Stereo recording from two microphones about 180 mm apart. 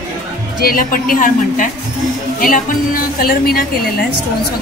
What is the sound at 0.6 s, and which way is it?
Speech, 55° left (ahead or behind).